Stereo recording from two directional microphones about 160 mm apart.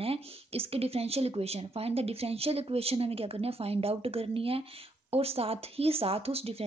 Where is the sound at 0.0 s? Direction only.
35° right (ahead or behind).